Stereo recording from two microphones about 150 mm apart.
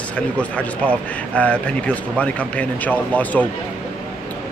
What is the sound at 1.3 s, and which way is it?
A man's voice, 10° left (ahead or behind).